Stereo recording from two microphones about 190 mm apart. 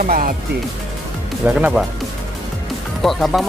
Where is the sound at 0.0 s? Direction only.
45° right (ahead or behind).